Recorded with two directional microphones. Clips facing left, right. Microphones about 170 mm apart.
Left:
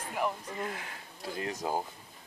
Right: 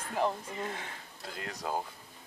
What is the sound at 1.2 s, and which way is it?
Speech, 20° left (ahead or behind).